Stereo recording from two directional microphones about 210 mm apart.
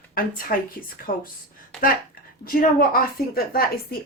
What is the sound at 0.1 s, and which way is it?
A woman's voice, 45° left (ahead or behind).